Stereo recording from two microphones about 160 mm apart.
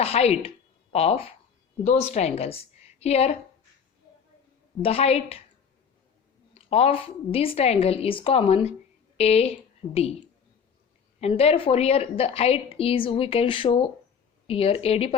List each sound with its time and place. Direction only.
0.0 s a woman's voice: 40° left (ahead or behind)
4.8 s a woman's voice: 40° left (ahead or behind)
6.5 s a woman's voice: 40° left (ahead or behind)
11.2 s a woman's voice: 40° left (ahead or behind)